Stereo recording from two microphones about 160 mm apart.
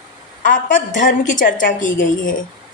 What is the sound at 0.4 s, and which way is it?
A woman's voice, 55° left (ahead or behind).